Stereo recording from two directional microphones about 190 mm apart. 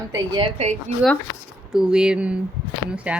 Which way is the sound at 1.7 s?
5° right (ahead or behind).